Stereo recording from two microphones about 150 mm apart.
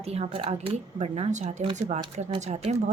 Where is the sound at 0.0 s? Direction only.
45° right (ahead or behind).